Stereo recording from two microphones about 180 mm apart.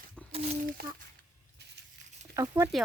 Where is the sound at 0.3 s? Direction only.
35° right (ahead or behind).